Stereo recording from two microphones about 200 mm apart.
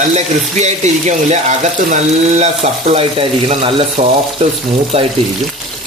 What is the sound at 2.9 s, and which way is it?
Speech, 30° right (ahead or behind).